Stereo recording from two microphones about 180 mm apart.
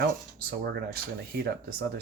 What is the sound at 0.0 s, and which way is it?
Speech, 60° right (ahead or behind).